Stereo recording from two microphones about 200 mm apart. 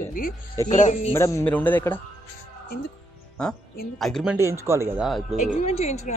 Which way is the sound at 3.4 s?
5° left (ahead or behind).